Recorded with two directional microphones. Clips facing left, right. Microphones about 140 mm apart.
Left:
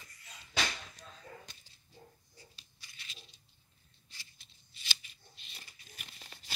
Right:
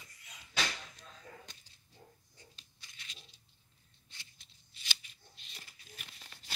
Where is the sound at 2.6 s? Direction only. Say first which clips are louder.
Even; 5° left (ahead or behind).